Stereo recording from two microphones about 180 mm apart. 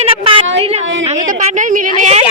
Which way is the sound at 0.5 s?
35° right (ahead or behind).